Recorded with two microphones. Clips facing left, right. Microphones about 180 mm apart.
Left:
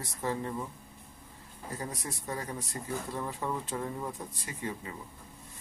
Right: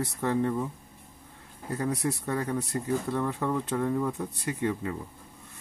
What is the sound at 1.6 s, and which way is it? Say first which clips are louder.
Speech: right 10 dB; 65° right (ahead or behind).